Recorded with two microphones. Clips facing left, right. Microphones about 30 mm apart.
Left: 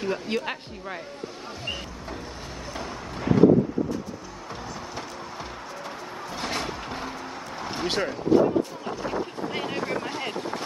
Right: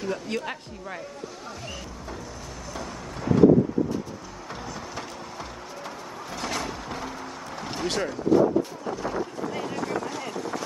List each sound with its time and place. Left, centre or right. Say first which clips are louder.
0.0 s speech: left 2 dB; left
2.7 s vehicle: left 1 dB; left
6.3 s a sound: even; left
7.0 s vehicle: left 1 dB; left
7.6 s speech: left 1 dB; centre; by 9.8 s left
9.8 s a sound: even; left
10.3 s vehicle: even; left